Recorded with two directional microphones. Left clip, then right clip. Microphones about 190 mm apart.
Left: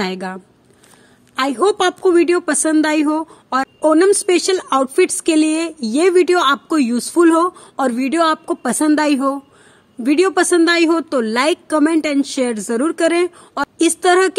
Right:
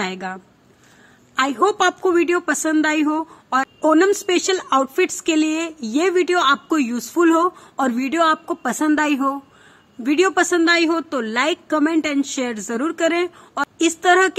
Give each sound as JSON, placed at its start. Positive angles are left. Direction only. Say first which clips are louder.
{"t": 0.0, "sound": "a woman's voice", "louder": "left 3 dB", "side_deg": 45}